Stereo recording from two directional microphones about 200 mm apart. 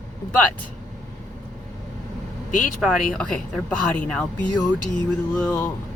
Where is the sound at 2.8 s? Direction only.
Centre (ahead or behind).